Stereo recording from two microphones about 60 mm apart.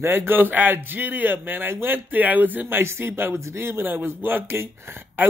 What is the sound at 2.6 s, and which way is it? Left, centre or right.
A man's voice, right.